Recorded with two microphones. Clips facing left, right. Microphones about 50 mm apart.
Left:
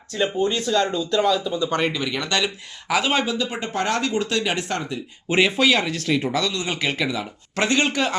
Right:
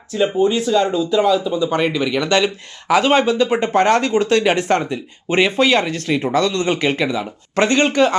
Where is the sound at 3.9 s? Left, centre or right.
Centre.